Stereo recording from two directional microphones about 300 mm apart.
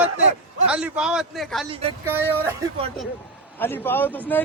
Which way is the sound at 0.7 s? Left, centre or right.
Centre.